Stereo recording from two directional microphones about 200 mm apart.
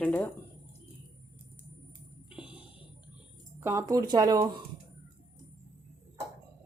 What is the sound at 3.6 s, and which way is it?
Speech, 15° right (ahead or behind).